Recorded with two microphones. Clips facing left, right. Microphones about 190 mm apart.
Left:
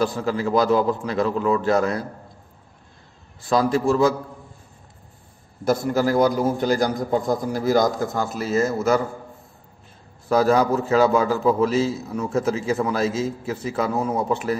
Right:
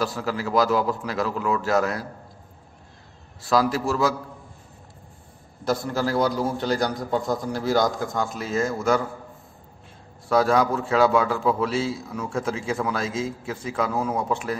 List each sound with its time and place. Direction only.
0.0 s a man's voice: centre (ahead or behind)
1.3 s a man's voice: 30° left (ahead or behind)
1.6 s a man's voice: 5° right (ahead or behind)
3.5 s a man's voice: centre (ahead or behind)
5.7 s a man's voice: 10° left (ahead or behind)
10.3 s a man's voice: 5° left (ahead or behind)